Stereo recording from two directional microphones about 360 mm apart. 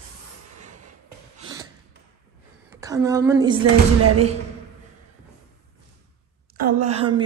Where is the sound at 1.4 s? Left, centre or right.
Centre.